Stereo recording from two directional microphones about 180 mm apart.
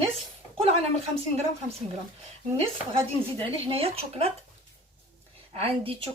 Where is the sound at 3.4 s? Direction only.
30° right (ahead or behind).